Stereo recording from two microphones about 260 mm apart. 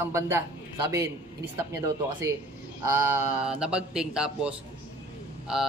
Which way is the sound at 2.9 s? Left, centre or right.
Centre.